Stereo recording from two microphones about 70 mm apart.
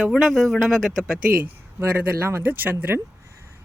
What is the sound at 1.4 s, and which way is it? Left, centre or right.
Speech, right.